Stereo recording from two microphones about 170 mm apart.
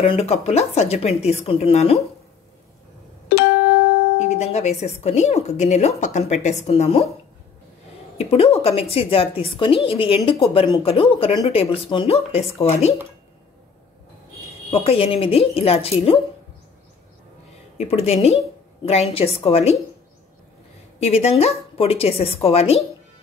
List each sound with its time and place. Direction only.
0.0 s speech: 35° left (ahead or behind)
4.2 s speech: 40° left (ahead or behind)
8.2 s speech: 35° left (ahead or behind)
14.7 s speech: 35° left (ahead or behind)
17.7 s speech: 40° left (ahead or behind)
21.0 s speech: 35° left (ahead or behind)